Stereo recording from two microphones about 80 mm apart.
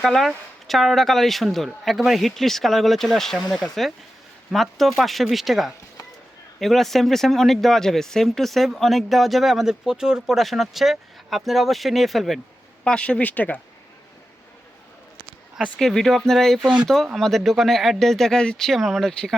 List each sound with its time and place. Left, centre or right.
0.0 s speech: centre
12.8 s speech: centre
15.8 s speech: centre